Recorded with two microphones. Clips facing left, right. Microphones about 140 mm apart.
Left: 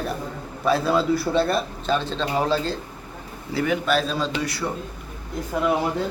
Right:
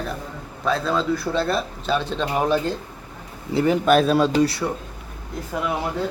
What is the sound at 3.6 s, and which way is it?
Speech, 35° right (ahead or behind).